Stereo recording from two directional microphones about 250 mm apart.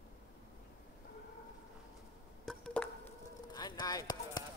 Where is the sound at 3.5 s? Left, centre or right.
Centre.